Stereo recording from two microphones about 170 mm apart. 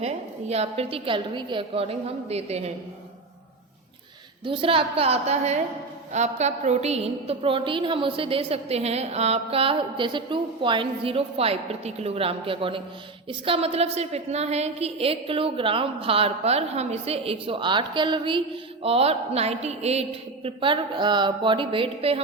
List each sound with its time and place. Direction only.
0.0 s a woman's voice: 40° right (ahead or behind)
4.4 s a woman's voice: 30° right (ahead or behind)